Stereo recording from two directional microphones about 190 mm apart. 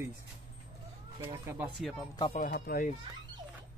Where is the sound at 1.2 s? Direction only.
15° right (ahead or behind).